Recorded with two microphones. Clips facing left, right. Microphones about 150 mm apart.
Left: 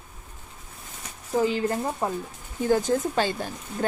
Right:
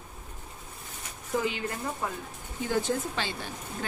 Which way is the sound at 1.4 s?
35° left (ahead or behind).